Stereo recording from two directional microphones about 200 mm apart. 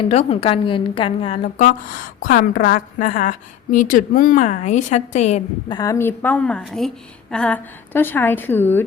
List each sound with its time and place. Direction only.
0.0 s a woman's voice: 30° left (ahead or behind)
5.6 s a woman's voice: 20° left (ahead or behind)